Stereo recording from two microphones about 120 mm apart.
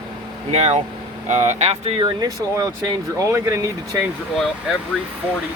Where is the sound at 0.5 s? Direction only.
60° right (ahead or behind).